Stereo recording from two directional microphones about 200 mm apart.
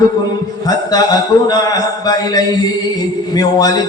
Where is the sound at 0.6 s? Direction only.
20° left (ahead or behind).